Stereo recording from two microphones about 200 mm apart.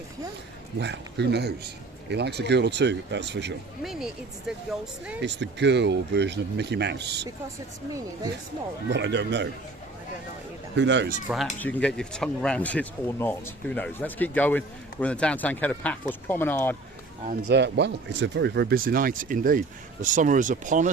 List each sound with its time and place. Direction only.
0.8 s a man's voice: 60° right (ahead or behind)
3.8 s speech: centre (ahead or behind)
5.2 s a man's voice: 60° right (ahead or behind)
8.9 s a man's voice: 60° right (ahead or behind)
10.8 s a man's voice: 65° right (ahead or behind)
11.6 s speech: 5° left (ahead or behind)
17.3 s speech: 55° right (ahead or behind); by 20.9 s 40° right (ahead or behind)